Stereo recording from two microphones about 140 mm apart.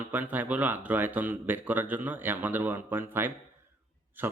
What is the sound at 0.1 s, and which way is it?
Speech, 10° right (ahead or behind).